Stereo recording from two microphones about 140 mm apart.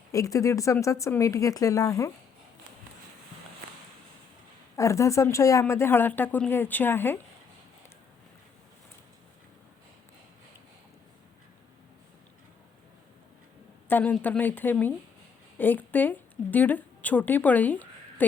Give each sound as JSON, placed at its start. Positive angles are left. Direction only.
{"t": 0.1, "sound": "speech", "side_deg": 25}
{"t": 4.8, "sound": "a woman's voice", "side_deg": 20}
{"t": 13.8, "sound": "a woman's voice", "side_deg": 10}